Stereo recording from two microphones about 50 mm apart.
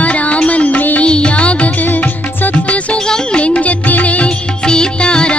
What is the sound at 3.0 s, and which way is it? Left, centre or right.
Music, centre.